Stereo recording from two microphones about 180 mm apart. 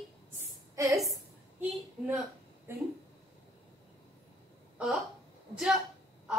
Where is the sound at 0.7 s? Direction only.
15° right (ahead or behind).